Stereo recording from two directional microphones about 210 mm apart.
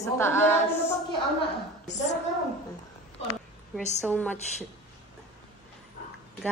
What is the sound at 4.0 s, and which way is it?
Speech, 5° left (ahead or behind).